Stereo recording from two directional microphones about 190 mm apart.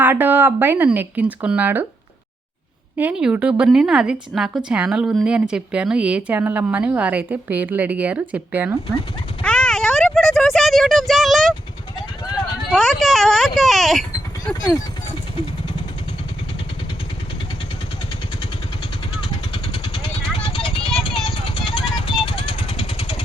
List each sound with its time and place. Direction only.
0.0 s speech: 10° right (ahead or behind)
3.0 s speech: 5° right (ahead or behind)
9.4 s a sound: 5° left (ahead or behind)
12.7 s speech: centre (ahead or behind)
19.8 s vehicle: 25° left (ahead or behind)